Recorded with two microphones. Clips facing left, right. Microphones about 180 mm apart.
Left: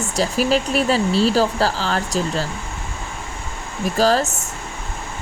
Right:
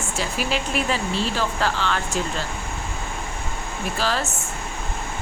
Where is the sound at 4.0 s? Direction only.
40° left (ahead or behind).